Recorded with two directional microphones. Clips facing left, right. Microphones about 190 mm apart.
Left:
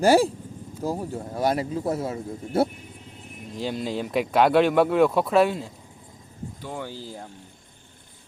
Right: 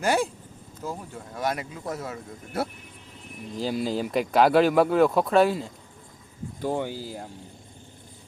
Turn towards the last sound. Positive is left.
turn(degrees=-5)  # may be behind; listen again after turning